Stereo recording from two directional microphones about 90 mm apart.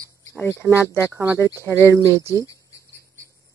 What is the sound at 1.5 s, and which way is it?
Speech, 30° right (ahead or behind).